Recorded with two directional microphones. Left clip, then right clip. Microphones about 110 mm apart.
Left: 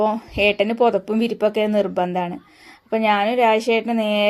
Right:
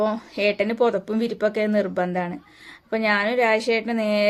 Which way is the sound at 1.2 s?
30° left (ahead or behind).